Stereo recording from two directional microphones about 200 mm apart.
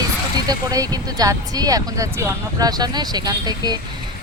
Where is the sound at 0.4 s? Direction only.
20° right (ahead or behind).